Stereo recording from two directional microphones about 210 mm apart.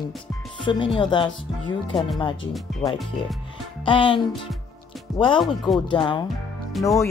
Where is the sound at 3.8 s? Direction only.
25° left (ahead or behind).